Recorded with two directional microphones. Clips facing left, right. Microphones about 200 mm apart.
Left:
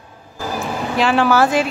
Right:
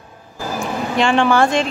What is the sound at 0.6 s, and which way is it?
Speech, 5° left (ahead or behind).